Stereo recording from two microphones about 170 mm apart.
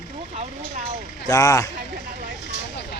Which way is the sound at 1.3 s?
20° left (ahead or behind).